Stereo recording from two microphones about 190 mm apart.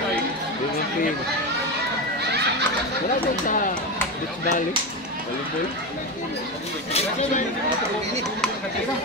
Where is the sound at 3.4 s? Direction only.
45° left (ahead or behind).